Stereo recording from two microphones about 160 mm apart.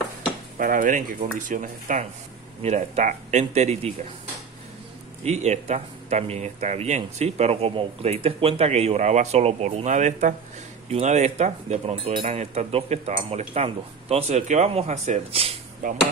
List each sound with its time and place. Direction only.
0.6 s speech: 60° right (ahead or behind); by 3.9 s 45° right (ahead or behind)
5.2 s speech: 45° right (ahead or behind)
15.8 s speech: 55° right (ahead or behind)